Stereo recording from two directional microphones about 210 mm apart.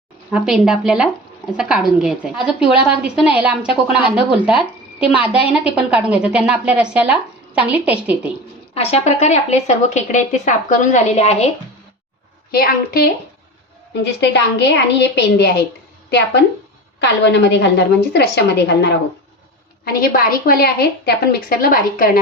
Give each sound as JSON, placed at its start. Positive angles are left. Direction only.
{"t": 0.3, "sound": "a woman's voice", "side_deg": -5}
{"t": 8.7, "sound": "a woman's voice", "side_deg": 30}
{"t": 12.5, "sound": "a woman's voice", "side_deg": 45}
{"t": 13.9, "sound": "a woman's voice", "side_deg": 55}